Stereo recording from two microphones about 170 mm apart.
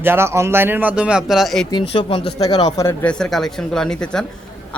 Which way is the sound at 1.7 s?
30° left (ahead or behind).